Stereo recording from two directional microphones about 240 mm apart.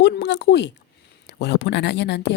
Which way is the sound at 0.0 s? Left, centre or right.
Left.